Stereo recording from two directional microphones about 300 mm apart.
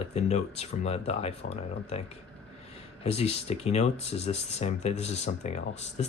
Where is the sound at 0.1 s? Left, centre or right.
Left.